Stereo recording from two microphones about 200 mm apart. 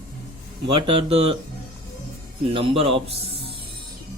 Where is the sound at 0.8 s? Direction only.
25° right (ahead or behind).